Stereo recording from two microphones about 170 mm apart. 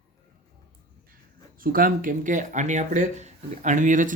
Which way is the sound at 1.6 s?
55° right (ahead or behind).